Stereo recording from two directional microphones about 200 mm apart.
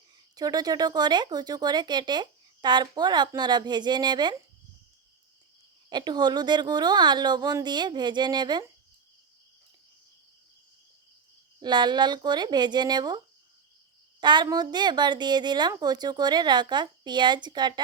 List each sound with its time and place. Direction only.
0.3 s speech: 20° right (ahead or behind)
5.9 s speech: 20° right (ahead or behind)
11.6 s speech: 20° right (ahead or behind)